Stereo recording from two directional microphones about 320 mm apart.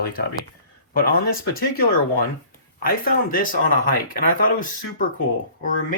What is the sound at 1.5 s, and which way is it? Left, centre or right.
Speech, left.